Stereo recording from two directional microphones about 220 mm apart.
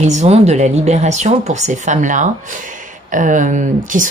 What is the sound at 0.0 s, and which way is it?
Speech, 30° right (ahead or behind).